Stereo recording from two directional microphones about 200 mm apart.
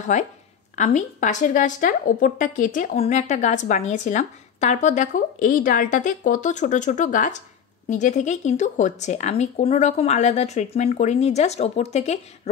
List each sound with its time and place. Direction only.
0.1 s speech: 35° left (ahead or behind)